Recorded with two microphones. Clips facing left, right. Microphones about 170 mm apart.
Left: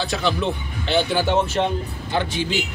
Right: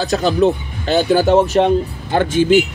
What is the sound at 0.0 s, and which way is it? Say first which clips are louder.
Speech: right 8 dB; 40° right (ahead or behind).